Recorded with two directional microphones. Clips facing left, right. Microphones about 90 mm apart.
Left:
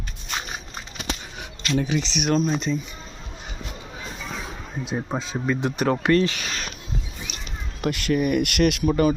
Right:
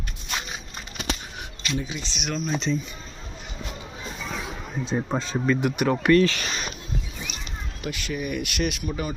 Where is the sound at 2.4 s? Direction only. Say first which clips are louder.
Left 2 dB; 5° left (ahead or behind).